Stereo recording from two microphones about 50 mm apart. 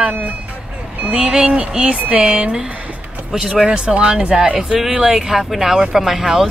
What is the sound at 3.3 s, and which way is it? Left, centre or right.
Speech, centre.